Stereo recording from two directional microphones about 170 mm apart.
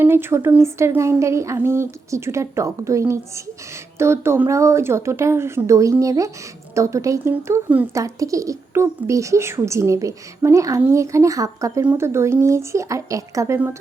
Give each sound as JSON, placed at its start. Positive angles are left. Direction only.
{"t": 0.0, "sound": "speech", "side_deg": -15}